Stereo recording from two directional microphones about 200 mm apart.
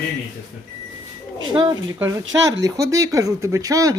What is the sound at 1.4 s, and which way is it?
Speech, 20° right (ahead or behind).